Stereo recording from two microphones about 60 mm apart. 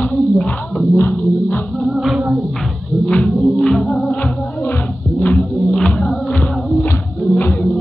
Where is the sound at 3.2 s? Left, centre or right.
Centre.